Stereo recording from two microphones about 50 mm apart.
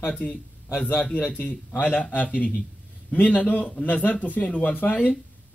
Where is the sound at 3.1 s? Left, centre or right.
Left.